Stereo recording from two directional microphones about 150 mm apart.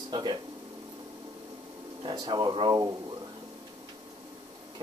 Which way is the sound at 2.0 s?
30° right (ahead or behind).